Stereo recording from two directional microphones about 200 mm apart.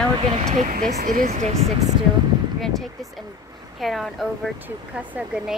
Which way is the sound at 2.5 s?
Centre (ahead or behind).